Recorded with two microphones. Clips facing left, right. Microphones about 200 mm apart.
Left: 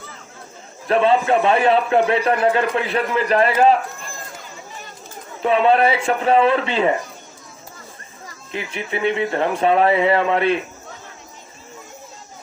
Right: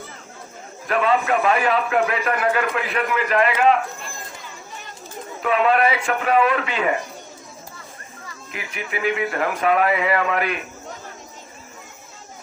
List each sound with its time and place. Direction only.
0.9 s a man's voice: 30° left (ahead or behind)
5.4 s speech: 30° left (ahead or behind)
8.7 s speech: 30° left (ahead or behind)